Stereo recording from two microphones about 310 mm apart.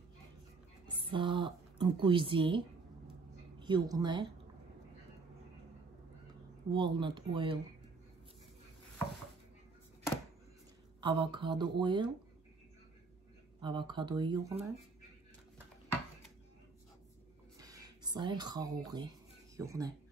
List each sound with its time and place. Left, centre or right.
0.8 s a woman's voice: centre
6.7 s speech: centre
11.0 s speech: centre
13.6 s speech: centre
17.6 s a sound: centre
18.9 s speech: centre